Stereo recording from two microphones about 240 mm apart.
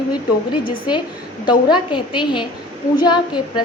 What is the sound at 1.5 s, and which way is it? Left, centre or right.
A woman's voice, centre.